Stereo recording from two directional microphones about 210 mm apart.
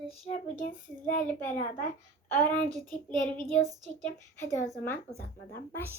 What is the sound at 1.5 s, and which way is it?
Speech, 40° left (ahead or behind).